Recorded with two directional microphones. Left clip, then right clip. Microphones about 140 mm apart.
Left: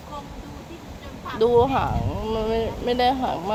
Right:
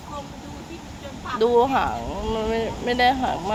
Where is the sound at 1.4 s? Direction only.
15° left (ahead or behind).